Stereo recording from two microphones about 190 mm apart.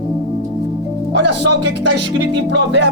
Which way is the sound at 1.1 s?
65° right (ahead or behind).